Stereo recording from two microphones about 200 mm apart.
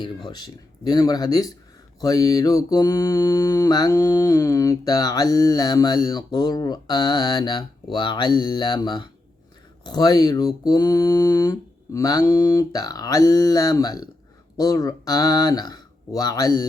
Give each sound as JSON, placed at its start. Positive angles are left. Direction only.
{"t": 0.0, "sound": "mantra", "side_deg": 20}
{"t": 14.5, "sound": "speech", "side_deg": 20}